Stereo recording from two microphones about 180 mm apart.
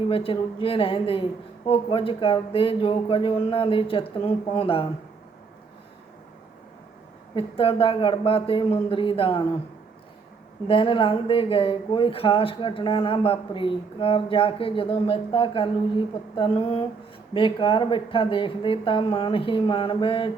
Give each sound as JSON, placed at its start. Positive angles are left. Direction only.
{"t": 0.1, "sound": "speech", "side_deg": 30}
{"t": 7.3, "sound": "speech", "side_deg": 30}
{"t": 10.7, "sound": "speech", "side_deg": 30}